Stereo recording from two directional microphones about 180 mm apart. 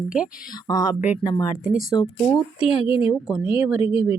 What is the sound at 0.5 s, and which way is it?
Speech, 20° left (ahead or behind).